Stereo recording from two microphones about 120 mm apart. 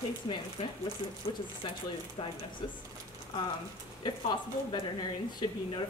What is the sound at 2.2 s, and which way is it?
Speech, 50° left (ahead or behind).